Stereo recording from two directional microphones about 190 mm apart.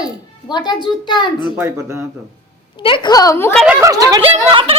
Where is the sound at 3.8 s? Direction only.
20° right (ahead or behind).